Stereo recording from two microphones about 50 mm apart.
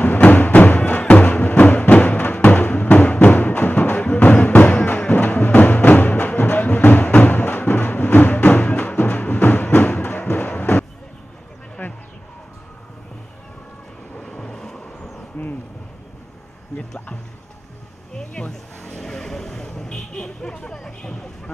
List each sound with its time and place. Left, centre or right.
0.0 s music: left
7.3 s music: left
11.8 s a sound: left
14.1 s vehicle: centre
18.1 s a sound: centre
18.9 s vehicle: centre